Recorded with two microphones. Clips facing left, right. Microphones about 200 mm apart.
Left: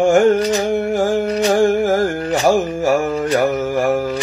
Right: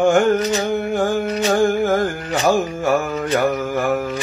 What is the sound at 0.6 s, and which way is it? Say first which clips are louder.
Music: left 3 dB; 30° left (ahead or behind).